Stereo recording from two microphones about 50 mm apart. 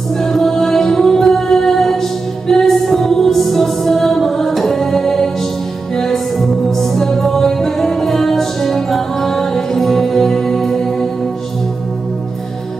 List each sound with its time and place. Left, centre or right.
0.2 s music: centre